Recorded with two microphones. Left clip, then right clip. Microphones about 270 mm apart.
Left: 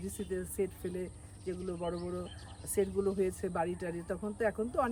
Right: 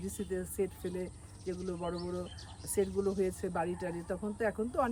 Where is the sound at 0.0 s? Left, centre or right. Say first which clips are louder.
Even; centre.